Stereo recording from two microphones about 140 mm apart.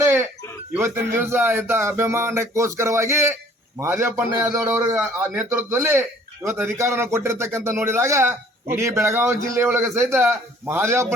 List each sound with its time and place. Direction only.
0.0 s chicken: 20° right (ahead or behind)
0.7 s speech: 20° right (ahead or behind)